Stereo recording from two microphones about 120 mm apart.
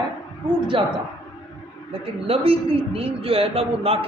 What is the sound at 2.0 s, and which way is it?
A man's voice, 55° right (ahead or behind).